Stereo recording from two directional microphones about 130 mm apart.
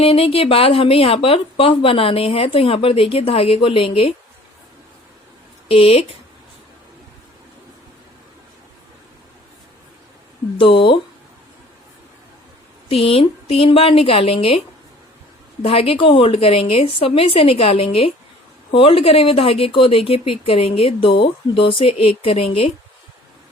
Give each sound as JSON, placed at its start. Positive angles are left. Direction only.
{"t": 0.0, "sound": "speech", "side_deg": 45}
{"t": 5.6, "sound": "speech", "side_deg": 50}
{"t": 10.6, "sound": "speech", "side_deg": 40}
{"t": 12.9, "sound": "speech", "side_deg": 50}
{"t": 15.6, "sound": "speech", "side_deg": 45}